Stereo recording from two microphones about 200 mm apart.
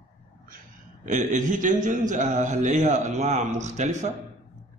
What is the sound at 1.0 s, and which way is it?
A man's voice, 40° right (ahead or behind).